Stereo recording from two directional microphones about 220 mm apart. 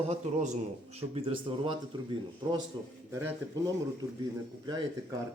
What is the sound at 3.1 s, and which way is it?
Speech, 10° right (ahead or behind).